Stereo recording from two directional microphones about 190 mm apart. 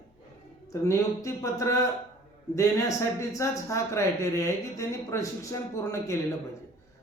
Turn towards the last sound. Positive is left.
turn(degrees=15)  # may be behind; listen again after turning